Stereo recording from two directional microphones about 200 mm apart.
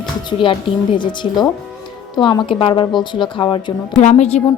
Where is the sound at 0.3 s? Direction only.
25° left (ahead or behind).